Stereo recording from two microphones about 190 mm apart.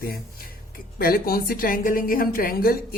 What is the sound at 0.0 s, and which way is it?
A woman's voice, 50° left (ahead or behind).